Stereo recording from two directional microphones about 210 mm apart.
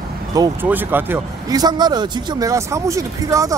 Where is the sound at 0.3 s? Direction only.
20° right (ahead or behind).